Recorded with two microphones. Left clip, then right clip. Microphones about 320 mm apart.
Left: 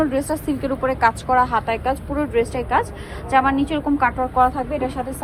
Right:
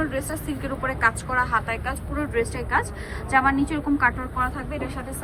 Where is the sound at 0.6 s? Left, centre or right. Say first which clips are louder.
Left 4 dB; centre.